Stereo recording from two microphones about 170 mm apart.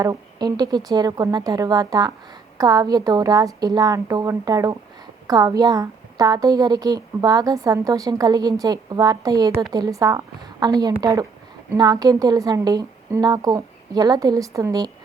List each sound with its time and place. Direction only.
0.0 s a woman's voice: 20° right (ahead or behind)